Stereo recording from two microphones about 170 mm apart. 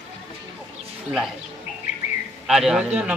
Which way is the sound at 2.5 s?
Centre (ahead or behind).